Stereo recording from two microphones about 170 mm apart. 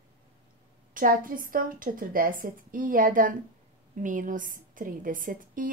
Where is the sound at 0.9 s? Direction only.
55° right (ahead or behind).